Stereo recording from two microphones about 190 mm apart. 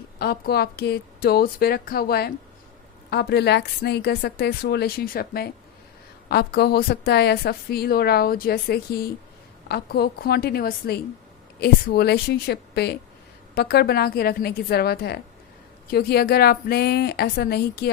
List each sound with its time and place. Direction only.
0.2 s a woman's voice: 55° left (ahead or behind)